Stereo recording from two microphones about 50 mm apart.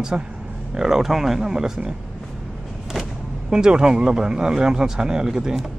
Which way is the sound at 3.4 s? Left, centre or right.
Centre.